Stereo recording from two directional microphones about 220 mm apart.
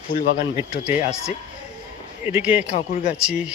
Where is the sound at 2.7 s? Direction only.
30° left (ahead or behind).